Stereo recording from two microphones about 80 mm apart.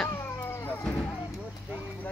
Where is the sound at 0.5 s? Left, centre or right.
Left.